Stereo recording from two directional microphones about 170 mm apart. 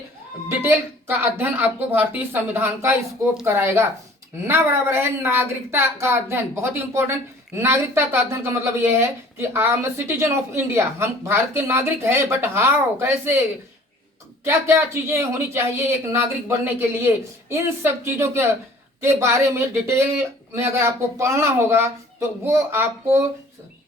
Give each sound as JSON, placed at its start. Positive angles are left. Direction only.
{"t": 0.4, "sound": "a woman's voice", "side_deg": -15}
{"t": 14.4, "sound": "a woman's voice", "side_deg": -15}